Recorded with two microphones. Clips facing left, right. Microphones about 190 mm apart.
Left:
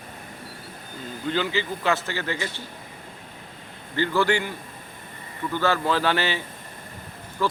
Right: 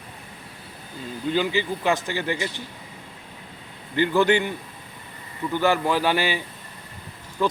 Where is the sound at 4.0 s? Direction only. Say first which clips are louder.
Right 3 dB; 20° right (ahead or behind).